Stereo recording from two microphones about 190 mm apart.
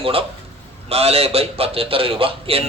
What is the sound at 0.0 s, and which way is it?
A man's voice, 30° right (ahead or behind).